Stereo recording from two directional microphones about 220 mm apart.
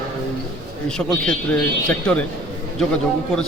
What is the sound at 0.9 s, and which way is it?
Speech, 5° left (ahead or behind).